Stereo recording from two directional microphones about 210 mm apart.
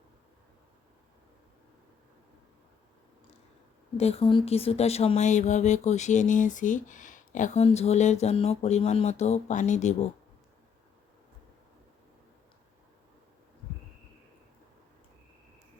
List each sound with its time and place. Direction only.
3.9 s speech: 30° left (ahead or behind)